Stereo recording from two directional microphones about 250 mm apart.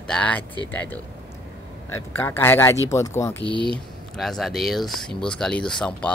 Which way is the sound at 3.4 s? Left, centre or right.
Centre.